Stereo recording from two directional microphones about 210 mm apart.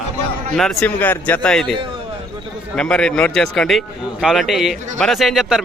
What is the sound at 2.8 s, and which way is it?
A man's voice, 5° left (ahead or behind).